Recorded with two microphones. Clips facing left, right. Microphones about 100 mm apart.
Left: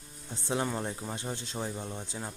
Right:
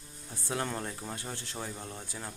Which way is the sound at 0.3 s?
20° left (ahead or behind).